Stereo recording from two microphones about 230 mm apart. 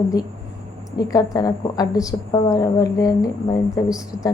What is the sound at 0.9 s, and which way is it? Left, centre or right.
A woman's voice, centre.